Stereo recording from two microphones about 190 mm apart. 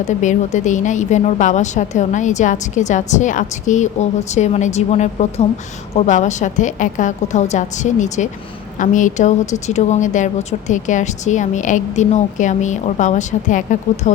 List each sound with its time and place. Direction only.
0.0 s speech: 40° left (ahead or behind)